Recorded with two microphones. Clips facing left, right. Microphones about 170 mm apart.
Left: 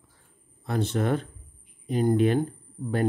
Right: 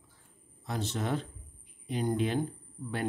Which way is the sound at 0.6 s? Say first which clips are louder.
Left 8 dB; 55° left (ahead or behind).